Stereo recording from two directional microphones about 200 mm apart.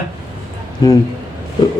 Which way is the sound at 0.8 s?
20° left (ahead or behind).